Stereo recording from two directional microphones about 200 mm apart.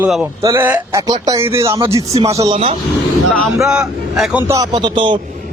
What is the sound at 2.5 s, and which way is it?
Speech, 30° right (ahead or behind).